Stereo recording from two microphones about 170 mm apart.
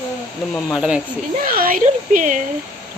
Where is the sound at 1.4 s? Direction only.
55° right (ahead or behind).